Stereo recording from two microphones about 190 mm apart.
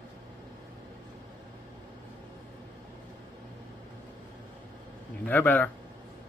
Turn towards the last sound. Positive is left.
turn(degrees=10)  # may be behind; listen again after turning